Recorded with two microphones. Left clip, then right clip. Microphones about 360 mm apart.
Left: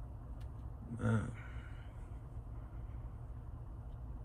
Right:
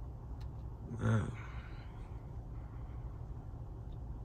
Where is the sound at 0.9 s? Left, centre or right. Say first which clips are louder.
Right 1 dB; centre.